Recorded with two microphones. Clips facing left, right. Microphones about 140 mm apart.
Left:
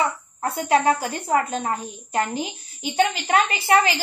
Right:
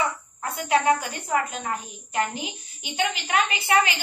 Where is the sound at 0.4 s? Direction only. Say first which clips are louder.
Left 3 dB; 35° left (ahead or behind).